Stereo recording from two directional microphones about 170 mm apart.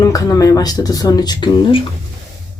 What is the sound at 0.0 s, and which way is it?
Speech, 20° left (ahead or behind).